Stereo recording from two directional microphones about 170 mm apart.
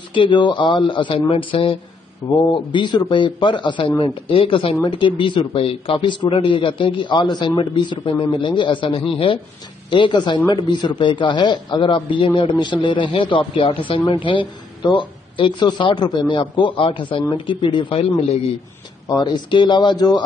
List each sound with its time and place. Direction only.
0.1 s a man's voice: 30° left (ahead or behind)